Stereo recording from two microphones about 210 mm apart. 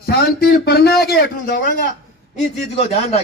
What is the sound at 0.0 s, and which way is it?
A man's voice, 50° left (ahead or behind).